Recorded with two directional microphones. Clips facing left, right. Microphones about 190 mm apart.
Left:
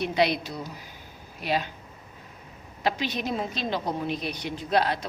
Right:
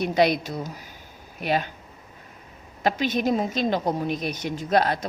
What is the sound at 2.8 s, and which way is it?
A woman's voice, 45° right (ahead or behind).